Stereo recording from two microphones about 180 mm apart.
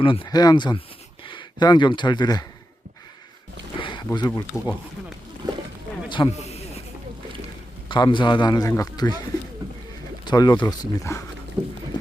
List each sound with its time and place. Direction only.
0.0 s speech: 30° left (ahead or behind)
3.8 s a sound: 25° left (ahead or behind)
4.5 s speech: centre (ahead or behind)
5.4 s a sound: 25° right (ahead or behind)
6.1 s snake: 30° left (ahead or behind)
7.9 s speech: 25° left (ahead or behind)
10.2 s speech: 25° left (ahead or behind)